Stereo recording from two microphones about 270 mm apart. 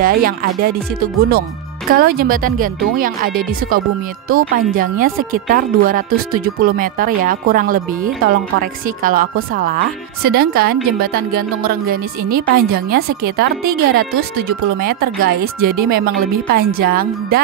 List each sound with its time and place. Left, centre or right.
0.0 s speech: right